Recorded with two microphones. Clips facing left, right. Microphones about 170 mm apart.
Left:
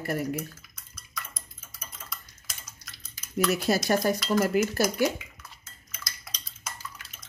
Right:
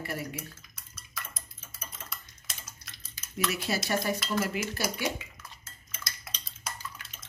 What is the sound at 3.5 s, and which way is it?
Speech, 40° left (ahead or behind).